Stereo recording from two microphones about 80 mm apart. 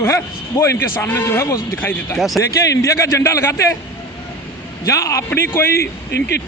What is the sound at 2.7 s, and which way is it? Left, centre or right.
Speech, left.